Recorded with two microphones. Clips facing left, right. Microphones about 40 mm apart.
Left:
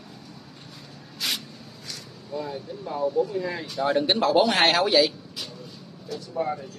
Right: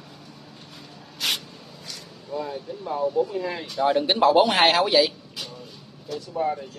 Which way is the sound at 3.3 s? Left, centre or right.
Right.